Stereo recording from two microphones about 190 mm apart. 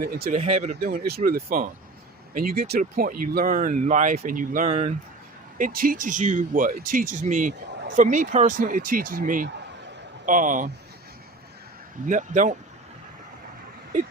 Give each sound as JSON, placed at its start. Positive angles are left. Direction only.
{"t": 0.0, "sound": "speech", "side_deg": -50}
{"t": 0.3, "sound": "speech", "side_deg": -35}
{"t": 12.0, "sound": "speech", "side_deg": -40}